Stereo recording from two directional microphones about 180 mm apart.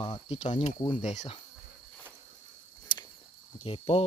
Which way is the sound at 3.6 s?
35° left (ahead or behind).